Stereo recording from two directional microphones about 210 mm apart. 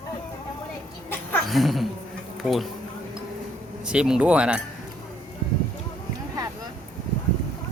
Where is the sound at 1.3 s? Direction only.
Centre (ahead or behind).